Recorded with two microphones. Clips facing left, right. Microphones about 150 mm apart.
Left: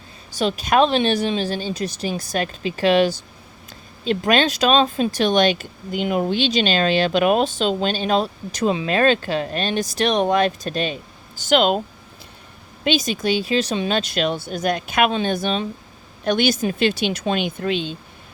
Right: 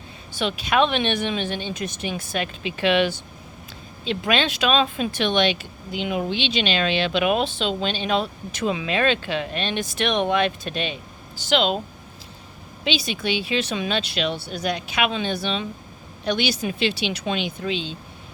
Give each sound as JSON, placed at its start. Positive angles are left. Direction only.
{"t": 0.3, "sound": "speech", "side_deg": 40}
{"t": 12.8, "sound": "speech", "side_deg": 45}